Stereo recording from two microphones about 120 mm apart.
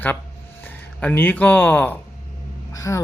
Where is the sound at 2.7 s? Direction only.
25° left (ahead or behind).